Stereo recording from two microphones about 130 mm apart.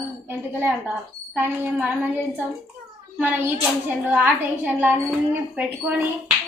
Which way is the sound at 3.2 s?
15° right (ahead or behind).